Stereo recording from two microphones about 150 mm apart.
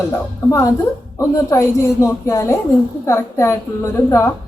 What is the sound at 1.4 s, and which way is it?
A woman's voice, 20° left (ahead or behind).